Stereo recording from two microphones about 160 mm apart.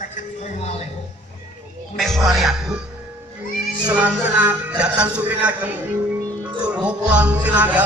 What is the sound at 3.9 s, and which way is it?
A man's voice, 10° right (ahead or behind).